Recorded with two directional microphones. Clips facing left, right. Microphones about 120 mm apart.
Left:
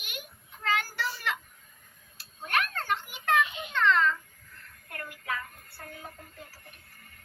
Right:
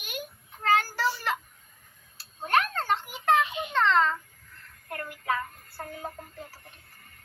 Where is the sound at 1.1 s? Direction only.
35° right (ahead or behind).